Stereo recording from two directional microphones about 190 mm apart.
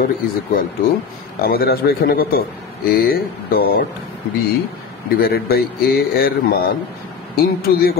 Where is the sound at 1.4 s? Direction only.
55° left (ahead or behind).